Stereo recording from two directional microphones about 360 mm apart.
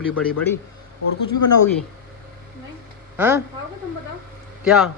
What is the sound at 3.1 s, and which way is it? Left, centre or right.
Speech, centre.